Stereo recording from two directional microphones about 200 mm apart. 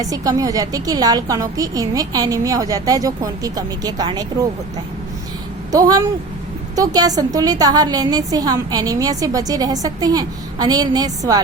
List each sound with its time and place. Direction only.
0.0 s a woman's voice: 20° right (ahead or behind)
6.7 s a woman's voice: 20° right (ahead or behind)